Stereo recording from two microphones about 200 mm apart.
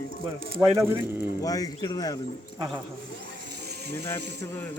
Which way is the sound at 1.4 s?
20° left (ahead or behind).